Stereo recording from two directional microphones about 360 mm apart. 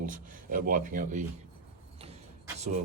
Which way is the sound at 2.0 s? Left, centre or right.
Centre.